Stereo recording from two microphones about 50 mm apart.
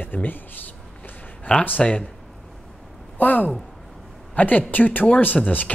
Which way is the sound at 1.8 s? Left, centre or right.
Centre.